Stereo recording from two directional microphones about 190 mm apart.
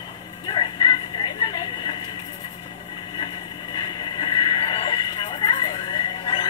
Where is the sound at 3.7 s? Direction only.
20° left (ahead or behind).